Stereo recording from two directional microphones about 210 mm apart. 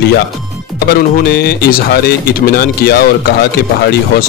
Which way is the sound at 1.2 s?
50° left (ahead or behind).